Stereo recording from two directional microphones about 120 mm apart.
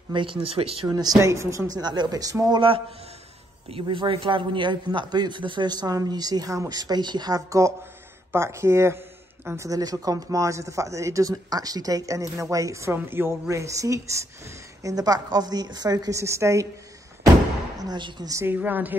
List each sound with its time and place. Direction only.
0.1 s speech: 45° right (ahead or behind)
0.8 s speech: 30° right (ahead or behind)
1.8 s a man's voice: 35° right (ahead or behind)
2.5 s a man's voice: 45° right (ahead or behind); by 16.6 s 25° right (ahead or behind)
17.7 s speech: 35° right (ahead or behind)
18.3 s a woman's voice: 20° right (ahead or behind)